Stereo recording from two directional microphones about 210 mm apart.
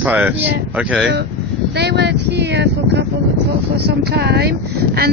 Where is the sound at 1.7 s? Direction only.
50° right (ahead or behind).